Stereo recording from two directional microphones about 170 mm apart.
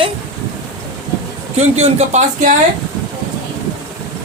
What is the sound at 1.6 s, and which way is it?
Speech, 40° right (ahead or behind).